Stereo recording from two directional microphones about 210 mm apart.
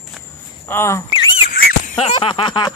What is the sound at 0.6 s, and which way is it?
Cricket, 10° left (ahead or behind).